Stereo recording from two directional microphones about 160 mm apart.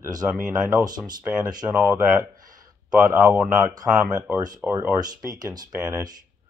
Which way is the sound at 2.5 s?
25° right (ahead or behind).